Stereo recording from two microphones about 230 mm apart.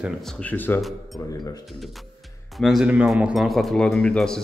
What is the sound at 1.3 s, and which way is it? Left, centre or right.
Speech, centre.